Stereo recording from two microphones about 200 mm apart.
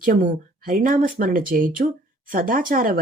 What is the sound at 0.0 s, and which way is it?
Speech, 45° right (ahead or behind).